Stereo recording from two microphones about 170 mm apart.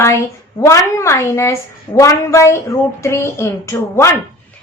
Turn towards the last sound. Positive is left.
turn(degrees=15)  # may be behind; listen again after turning